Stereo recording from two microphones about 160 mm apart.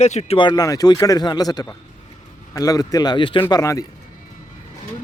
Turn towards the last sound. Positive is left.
turn(degrees=20)  # may be behind; listen again after turning